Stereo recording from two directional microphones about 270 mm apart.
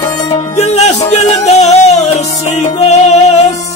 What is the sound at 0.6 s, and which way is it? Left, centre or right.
Music, left.